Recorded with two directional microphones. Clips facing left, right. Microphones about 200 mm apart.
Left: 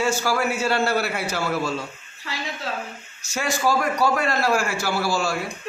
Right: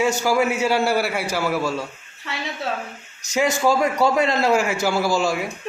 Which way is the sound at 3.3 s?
20° right (ahead or behind).